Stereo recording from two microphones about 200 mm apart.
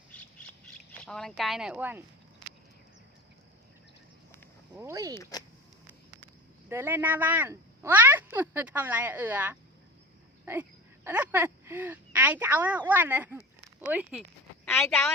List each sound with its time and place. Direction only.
0.1 s squawk: 5° left (ahead or behind); by 2.0 s 10° right (ahead or behind)
4.7 s speech: 15° right (ahead or behind)
5.1 s speech: 15° left (ahead or behind)
6.7 s speech: 10° right (ahead or behind)